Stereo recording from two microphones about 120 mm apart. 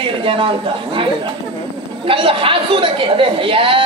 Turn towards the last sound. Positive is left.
turn(degrees=-45)  # may be behind; listen again after turning